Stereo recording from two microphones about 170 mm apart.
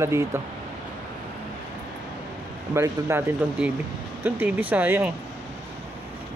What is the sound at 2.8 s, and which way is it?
Speech, 15° right (ahead or behind).